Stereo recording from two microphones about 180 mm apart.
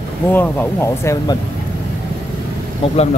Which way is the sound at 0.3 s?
10° left (ahead or behind).